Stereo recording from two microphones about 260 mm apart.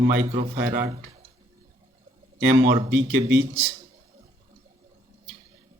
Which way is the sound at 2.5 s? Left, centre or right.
Right.